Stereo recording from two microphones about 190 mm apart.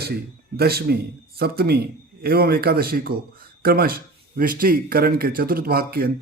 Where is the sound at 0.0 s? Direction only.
55° right (ahead or behind).